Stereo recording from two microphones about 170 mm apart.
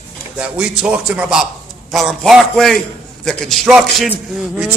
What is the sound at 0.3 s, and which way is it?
A man's voice, 5° right (ahead or behind).